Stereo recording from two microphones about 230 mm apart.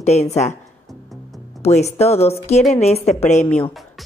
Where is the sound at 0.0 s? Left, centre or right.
Left.